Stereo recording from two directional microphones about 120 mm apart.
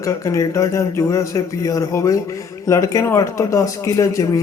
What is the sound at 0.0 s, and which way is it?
Speech, 25° left (ahead or behind).